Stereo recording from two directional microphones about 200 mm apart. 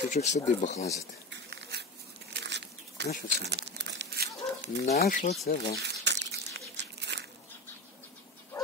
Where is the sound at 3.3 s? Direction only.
55° right (ahead or behind).